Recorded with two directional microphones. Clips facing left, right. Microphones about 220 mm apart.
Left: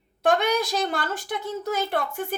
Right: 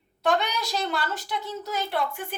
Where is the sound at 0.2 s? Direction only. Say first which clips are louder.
Left 4 dB; 50° left (ahead or behind).